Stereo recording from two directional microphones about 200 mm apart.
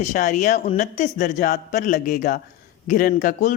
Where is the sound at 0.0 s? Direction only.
35° left (ahead or behind).